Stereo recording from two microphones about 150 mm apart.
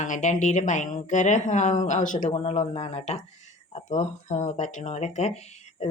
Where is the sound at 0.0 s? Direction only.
50° left (ahead or behind).